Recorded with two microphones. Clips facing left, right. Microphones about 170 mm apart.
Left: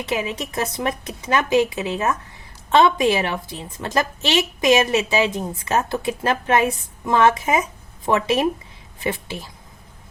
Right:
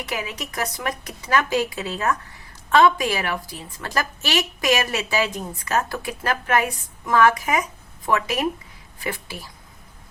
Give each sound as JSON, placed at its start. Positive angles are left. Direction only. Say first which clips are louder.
{"t": 0.0, "sound": "a woman's voice", "louder": "left 5 dB", "side_deg": 25}